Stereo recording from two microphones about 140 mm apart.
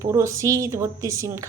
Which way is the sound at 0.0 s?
20° right (ahead or behind).